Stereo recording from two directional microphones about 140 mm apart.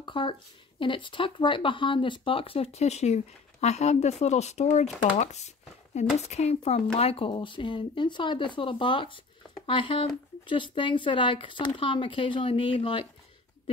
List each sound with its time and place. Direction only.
0.0 s speech: 35° left (ahead or behind)